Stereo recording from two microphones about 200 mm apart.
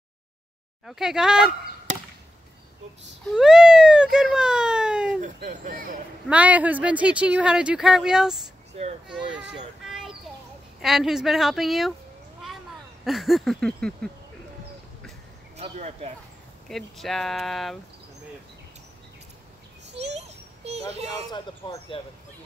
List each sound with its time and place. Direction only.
0.8 s speech: centre (ahead or behind)
3.3 s speech: centre (ahead or behind)
5.5 s speech: 45° right (ahead or behind)
6.2 s speech: 5° right (ahead or behind)
9.8 s a sound: centre (ahead or behind)
10.8 s speech: centre (ahead or behind)
13.0 s speech: centre (ahead or behind)
15.5 s speech: 35° right (ahead or behind)
16.6 s speech: centre (ahead or behind)
20.2 s a sound: 30° right (ahead or behind)
20.9 s speech: 30° right (ahead or behind)
21.3 s speech: 25° left (ahead or behind)